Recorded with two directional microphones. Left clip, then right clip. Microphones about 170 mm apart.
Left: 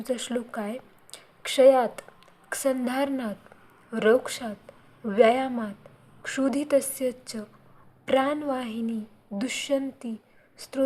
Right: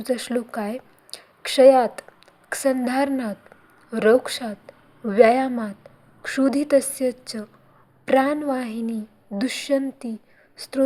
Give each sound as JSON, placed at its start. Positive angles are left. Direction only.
{"t": 0.0, "sound": "a woman's voice", "side_deg": -20}